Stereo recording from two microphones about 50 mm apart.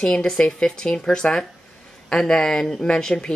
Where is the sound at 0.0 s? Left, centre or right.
Centre.